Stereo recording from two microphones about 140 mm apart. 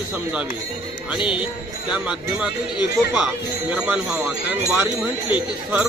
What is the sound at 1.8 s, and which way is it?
Speech, 5° right (ahead or behind).